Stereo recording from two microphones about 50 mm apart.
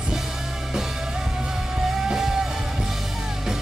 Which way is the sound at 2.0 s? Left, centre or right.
Centre.